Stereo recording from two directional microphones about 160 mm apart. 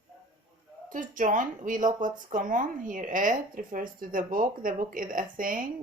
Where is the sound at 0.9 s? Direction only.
55° right (ahead or behind).